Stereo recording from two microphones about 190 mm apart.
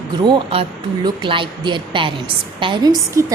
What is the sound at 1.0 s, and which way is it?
A woman's voice, 25° right (ahead or behind).